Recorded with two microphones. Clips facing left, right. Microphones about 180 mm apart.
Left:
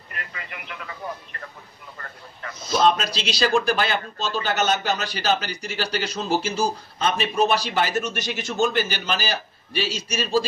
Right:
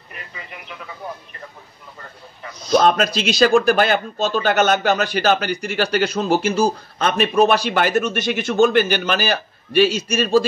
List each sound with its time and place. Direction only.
2.7 s speech: 55° right (ahead or behind)